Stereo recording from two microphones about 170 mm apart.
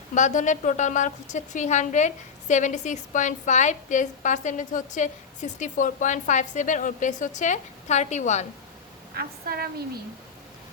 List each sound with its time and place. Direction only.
0.1 s a woman's voice: 45° left (ahead or behind)
9.1 s a woman's voice: 65° right (ahead or behind)